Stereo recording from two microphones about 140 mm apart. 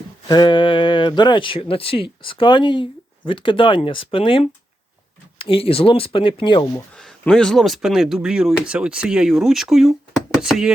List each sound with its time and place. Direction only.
0.3 s speech: 35° left (ahead or behind)
6.9 s speech: 5° left (ahead or behind)